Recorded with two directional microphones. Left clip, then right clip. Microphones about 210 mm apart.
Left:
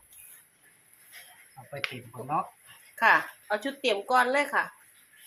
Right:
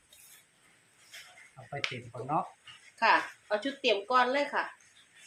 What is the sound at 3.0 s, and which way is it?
Speech, 15° left (ahead or behind).